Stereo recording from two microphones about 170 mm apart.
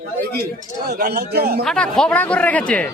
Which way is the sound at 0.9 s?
70° right (ahead or behind).